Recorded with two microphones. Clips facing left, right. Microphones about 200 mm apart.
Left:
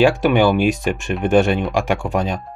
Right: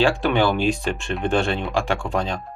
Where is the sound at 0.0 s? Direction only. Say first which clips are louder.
Left 5 dB; 15° left (ahead or behind).